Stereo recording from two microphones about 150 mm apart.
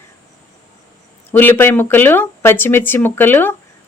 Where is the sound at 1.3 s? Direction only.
15° left (ahead or behind).